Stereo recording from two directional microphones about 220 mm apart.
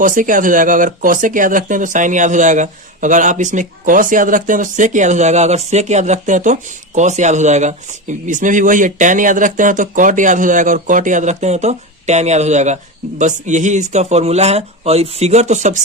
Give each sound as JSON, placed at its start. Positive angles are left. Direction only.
{"t": 0.0, "sound": "speech", "side_deg": -35}